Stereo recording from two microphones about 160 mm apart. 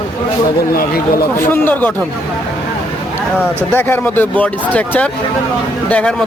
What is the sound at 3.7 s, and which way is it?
Speech, 15° left (ahead or behind).